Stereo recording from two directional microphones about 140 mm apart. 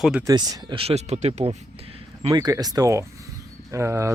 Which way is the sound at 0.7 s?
45° right (ahead or behind).